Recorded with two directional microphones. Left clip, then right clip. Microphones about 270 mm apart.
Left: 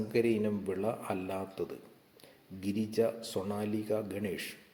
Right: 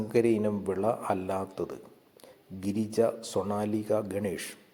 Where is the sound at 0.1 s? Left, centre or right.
Centre.